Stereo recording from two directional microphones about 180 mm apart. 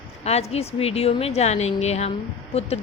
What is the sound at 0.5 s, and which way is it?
A woman's voice, 35° left (ahead or behind).